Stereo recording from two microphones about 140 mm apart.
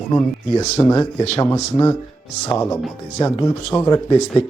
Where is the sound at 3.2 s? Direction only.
20° left (ahead or behind).